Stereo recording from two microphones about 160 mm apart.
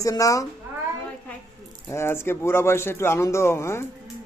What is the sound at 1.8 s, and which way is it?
A man's voice, 15° left (ahead or behind).